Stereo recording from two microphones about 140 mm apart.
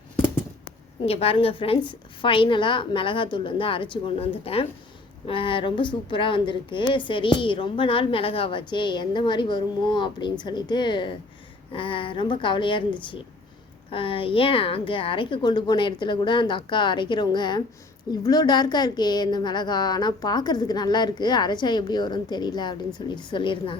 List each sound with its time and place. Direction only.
1.0 s a woman's voice: 45° left (ahead or behind)
13.9 s speech: 40° left (ahead or behind)